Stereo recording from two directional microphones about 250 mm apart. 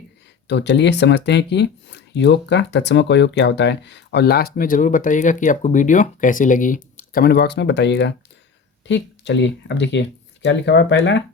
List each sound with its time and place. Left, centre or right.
0.4 s speech: left